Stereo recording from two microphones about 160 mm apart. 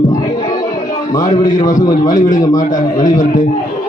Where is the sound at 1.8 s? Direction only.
25° left (ahead or behind).